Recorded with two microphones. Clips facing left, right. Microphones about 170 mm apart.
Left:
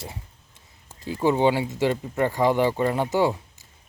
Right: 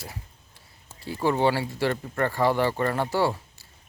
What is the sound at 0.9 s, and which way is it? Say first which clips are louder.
Speech: left 3 dB; 15° left (ahead or behind).